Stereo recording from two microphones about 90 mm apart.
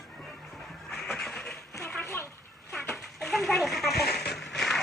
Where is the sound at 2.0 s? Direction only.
35° left (ahead or behind).